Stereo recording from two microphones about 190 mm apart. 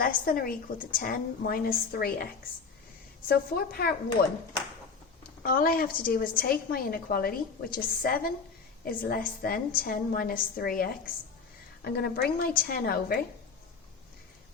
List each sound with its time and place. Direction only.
0.0 s a woman's voice: 50° left (ahead or behind)
3.2 s a woman's voice: 55° left (ahead or behind)
5.4 s a woman's voice: 50° left (ahead or behind)